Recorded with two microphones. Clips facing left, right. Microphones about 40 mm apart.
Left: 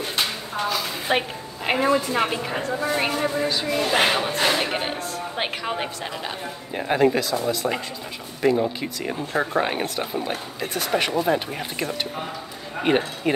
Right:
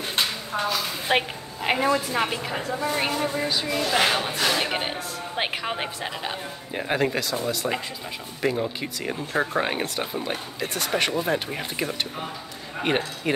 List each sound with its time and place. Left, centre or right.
0.6 s a woman's voice: centre
3.8 s speech: left
4.6 s speech: centre